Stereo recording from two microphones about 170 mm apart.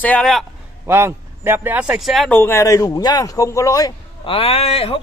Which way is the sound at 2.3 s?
15° left (ahead or behind).